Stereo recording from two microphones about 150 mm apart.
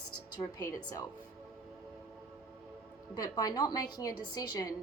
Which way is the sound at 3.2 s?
25° left (ahead or behind).